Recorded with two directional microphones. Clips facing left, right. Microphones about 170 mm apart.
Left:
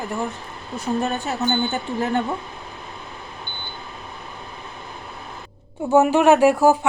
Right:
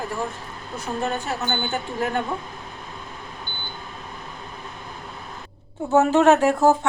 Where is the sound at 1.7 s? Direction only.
20° left (ahead or behind).